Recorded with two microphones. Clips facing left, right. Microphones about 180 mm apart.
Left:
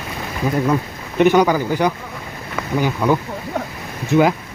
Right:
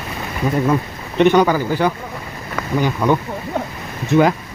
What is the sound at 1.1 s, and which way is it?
Speech, 10° left (ahead or behind).